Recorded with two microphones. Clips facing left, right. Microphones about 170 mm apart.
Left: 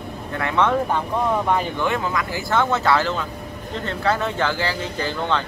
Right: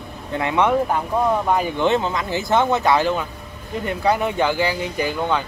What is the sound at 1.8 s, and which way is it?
Speech, 25° right (ahead or behind).